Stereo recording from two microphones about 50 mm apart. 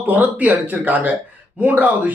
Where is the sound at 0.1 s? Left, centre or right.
Right.